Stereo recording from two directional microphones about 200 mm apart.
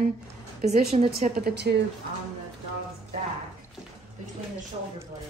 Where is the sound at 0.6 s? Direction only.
45° right (ahead or behind).